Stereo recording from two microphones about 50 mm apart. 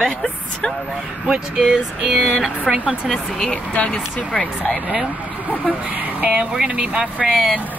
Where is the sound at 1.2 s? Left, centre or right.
Centre.